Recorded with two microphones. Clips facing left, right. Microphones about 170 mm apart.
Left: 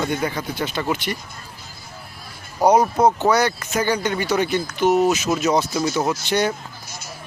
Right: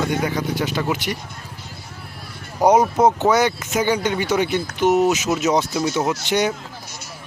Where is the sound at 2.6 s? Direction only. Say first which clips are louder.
Right 1 dB; 15° right (ahead or behind).